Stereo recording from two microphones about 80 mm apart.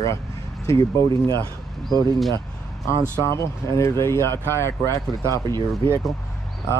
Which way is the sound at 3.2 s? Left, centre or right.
Left.